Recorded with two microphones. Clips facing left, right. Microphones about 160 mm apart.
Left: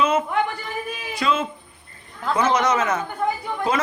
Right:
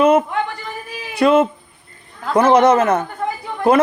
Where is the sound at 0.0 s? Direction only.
60° right (ahead or behind).